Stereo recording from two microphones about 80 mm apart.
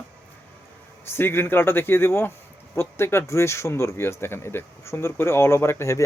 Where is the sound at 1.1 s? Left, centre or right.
Left.